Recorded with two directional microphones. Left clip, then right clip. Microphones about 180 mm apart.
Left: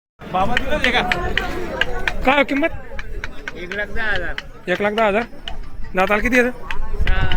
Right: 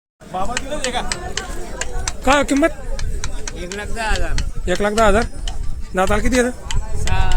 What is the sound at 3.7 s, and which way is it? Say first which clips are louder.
Speech: left 2 dB; 70° right (ahead or behind).